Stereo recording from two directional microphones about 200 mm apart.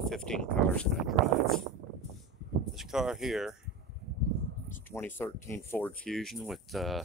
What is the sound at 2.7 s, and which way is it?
Speech, centre (ahead or behind).